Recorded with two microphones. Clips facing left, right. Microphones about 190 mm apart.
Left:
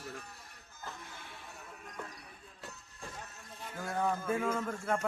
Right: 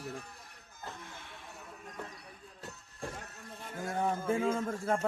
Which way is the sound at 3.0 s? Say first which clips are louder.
Right 5 dB; 50° right (ahead or behind).